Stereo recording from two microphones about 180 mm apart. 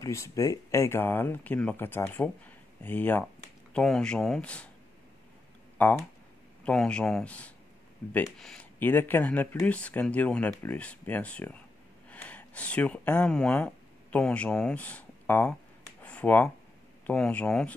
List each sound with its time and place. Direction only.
0.0 s speech: 15° left (ahead or behind)
5.8 s speech: 10° left (ahead or behind)
16.0 s a sound: 10° left (ahead or behind)
17.0 s speech: 5° left (ahead or behind)